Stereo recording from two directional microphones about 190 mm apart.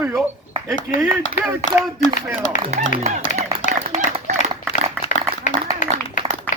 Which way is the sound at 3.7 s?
35° right (ahead or behind).